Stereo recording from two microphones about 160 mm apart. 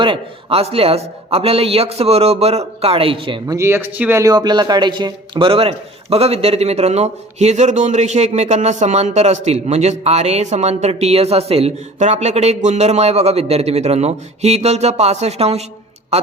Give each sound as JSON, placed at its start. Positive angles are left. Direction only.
{"t": 0.0, "sound": "a man's voice", "side_deg": -35}